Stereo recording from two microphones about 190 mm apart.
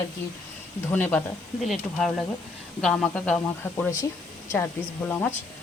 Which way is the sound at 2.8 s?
5° left (ahead or behind).